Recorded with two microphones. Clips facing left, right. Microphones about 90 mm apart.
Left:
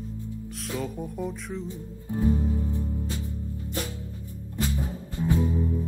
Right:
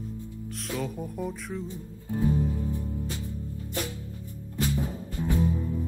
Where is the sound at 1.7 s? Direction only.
25° left (ahead or behind).